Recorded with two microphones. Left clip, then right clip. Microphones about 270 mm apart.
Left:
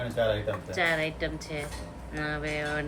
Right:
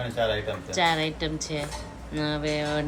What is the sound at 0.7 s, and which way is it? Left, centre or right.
A woman's voice, centre.